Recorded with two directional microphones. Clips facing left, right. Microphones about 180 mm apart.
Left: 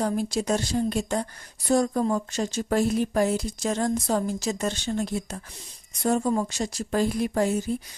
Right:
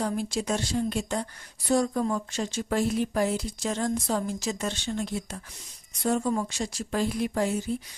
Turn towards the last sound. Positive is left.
turn(degrees=45)  # may be behind; listen again after turning